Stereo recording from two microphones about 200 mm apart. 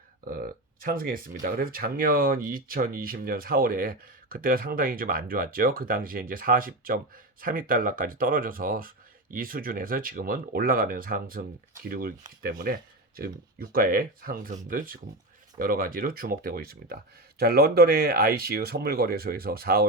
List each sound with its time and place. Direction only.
0.3 s speech: 45° right (ahead or behind)